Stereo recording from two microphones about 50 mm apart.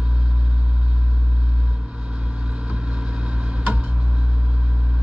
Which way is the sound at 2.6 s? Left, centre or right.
Right.